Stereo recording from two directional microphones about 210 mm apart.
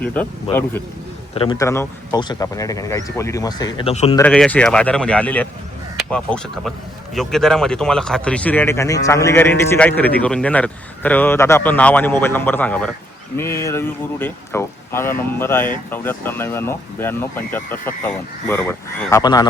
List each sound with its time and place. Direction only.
0.0 s speech: 5° left (ahead or behind)
1.4 s speech: 20° left (ahead or behind)
4.2 s speech: 5° left (ahead or behind)